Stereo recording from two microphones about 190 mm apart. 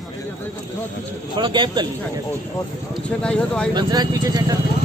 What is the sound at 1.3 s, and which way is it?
Speech, 25° right (ahead or behind).